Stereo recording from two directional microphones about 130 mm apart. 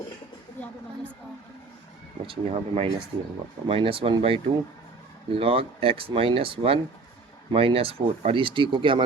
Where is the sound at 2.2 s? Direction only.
45° right (ahead or behind).